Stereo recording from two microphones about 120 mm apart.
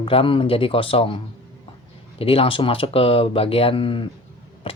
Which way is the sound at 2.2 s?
50° left (ahead or behind).